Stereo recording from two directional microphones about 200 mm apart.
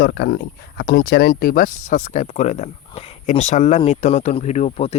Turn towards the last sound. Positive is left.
turn(degrees=30)  # may be behind; listen again after turning